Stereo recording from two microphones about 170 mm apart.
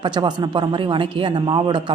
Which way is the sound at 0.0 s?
25° right (ahead or behind).